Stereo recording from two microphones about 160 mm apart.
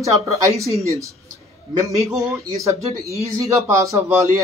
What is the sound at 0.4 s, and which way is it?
A man's voice, 20° right (ahead or behind).